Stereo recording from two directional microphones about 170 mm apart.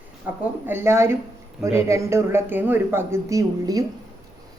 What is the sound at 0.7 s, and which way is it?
Speech, 15° right (ahead or behind).